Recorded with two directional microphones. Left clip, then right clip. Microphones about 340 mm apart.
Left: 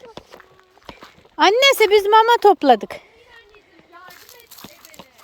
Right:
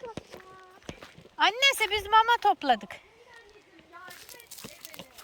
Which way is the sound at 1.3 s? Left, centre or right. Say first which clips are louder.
Left 10 dB; centre.